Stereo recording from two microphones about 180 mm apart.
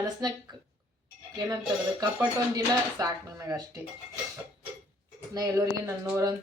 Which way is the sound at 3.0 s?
20° right (ahead or behind).